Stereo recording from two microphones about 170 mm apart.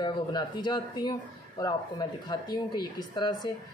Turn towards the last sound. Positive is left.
turn(degrees=25)  # may be behind; listen again after turning